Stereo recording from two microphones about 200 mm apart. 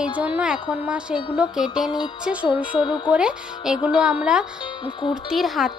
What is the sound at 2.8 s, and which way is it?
Speech, 20° left (ahead or behind).